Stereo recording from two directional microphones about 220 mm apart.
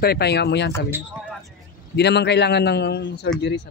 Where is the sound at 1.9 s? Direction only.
50° left (ahead or behind).